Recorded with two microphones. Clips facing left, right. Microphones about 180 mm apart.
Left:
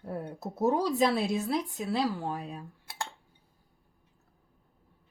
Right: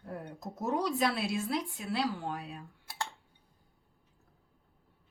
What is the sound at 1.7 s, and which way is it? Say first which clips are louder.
Speech: left 4 dB; 45° left (ahead or behind).